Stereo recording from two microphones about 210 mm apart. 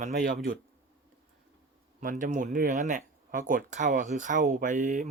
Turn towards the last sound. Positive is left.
turn(degrees=-35)  # may be behind; listen again after turning